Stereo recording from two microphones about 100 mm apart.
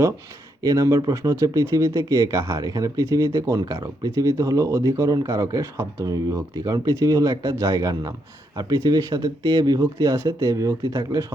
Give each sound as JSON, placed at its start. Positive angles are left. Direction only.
{"t": 0.6, "sound": "speech", "side_deg": -35}